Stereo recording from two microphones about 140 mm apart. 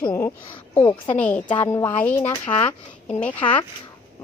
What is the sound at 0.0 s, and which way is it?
A woman's voice, 20° left (ahead or behind).